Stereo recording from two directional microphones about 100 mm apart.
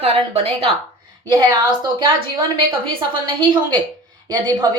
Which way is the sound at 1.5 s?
55° right (ahead or behind).